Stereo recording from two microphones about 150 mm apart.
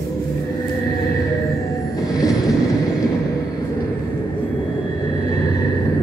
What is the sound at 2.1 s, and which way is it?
Vehicle, 25° left (ahead or behind).